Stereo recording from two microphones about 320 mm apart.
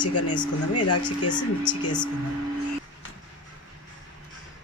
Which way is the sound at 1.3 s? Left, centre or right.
Centre.